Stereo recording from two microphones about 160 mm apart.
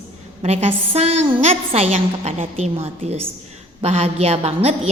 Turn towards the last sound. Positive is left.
turn(degrees=-40)  # may be behind; listen again after turning